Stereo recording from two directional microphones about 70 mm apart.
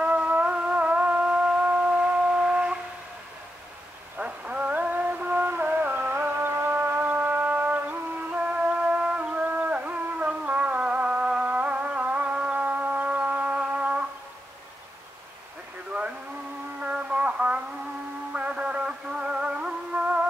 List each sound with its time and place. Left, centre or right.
0.0 s music: centre
4.2 s music: centre
16.8 s a sound: centre
18.3 s music: centre